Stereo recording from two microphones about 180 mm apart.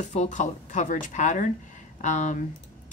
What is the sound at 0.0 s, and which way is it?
Speech, 40° left (ahead or behind).